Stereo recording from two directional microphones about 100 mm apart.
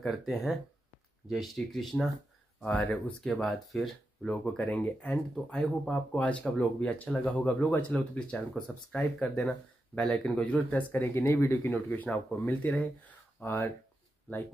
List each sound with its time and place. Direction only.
0.0 s speech: centre (ahead or behind)
2.6 s speech: 10° left (ahead or behind)